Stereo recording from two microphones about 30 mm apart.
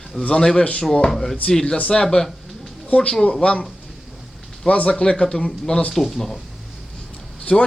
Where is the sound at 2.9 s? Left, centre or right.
Left.